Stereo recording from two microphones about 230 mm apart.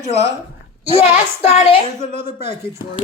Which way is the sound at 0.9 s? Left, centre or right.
Left.